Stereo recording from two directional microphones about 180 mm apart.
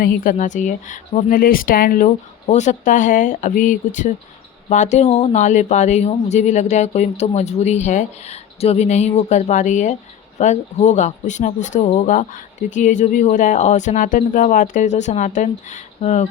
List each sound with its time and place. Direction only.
0.0 s speech: 50° left (ahead or behind)